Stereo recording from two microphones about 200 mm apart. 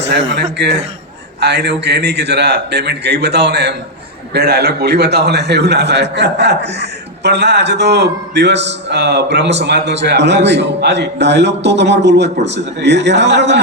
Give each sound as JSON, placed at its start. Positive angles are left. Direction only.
{"t": 0.1, "sound": "a man's voice", "side_deg": -60}